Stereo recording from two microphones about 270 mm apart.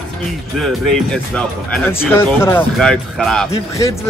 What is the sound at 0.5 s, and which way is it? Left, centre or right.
Speech, centre.